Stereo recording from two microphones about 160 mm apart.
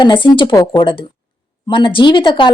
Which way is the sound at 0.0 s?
30° left (ahead or behind).